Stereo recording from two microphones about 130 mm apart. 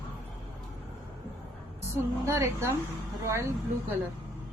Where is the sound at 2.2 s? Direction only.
20° right (ahead or behind).